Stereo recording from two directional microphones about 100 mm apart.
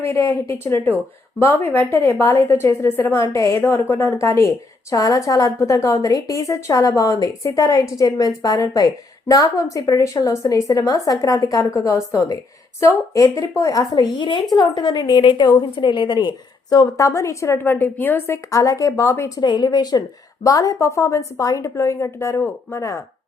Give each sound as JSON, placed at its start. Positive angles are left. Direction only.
{"t": 0.1, "sound": "a woman's voice", "side_deg": 25}
{"t": 13.9, "sound": "speech", "side_deg": 50}
{"t": 14.5, "sound": "a woman's voice", "side_deg": 45}
{"t": 18.5, "sound": "a woman's voice", "side_deg": 35}
{"t": 19.4, "sound": "a woman's voice", "side_deg": 45}